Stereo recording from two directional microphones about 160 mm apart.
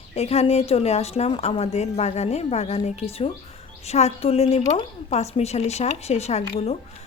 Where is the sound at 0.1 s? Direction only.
40° left (ahead or behind).